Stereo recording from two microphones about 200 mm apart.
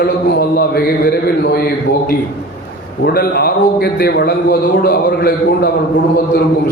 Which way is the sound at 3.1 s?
50° left (ahead or behind).